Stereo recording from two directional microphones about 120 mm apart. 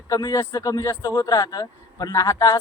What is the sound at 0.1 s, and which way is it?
Speech, 30° left (ahead or behind).